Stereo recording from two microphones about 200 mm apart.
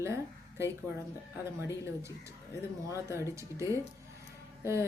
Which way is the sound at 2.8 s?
15° right (ahead or behind).